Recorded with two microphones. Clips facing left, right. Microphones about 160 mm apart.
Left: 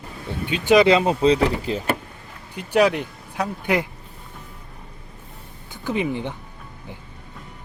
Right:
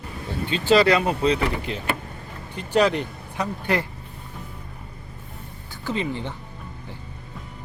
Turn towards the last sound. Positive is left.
turn(degrees=15)  # may be behind; listen again after turning